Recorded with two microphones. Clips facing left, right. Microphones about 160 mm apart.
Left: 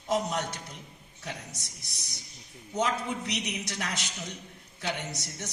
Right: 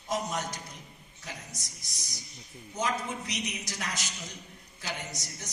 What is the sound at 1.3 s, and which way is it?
A man's voice, 65° left (ahead or behind).